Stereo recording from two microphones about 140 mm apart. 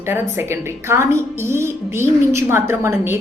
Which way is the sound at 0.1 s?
20° right (ahead or behind).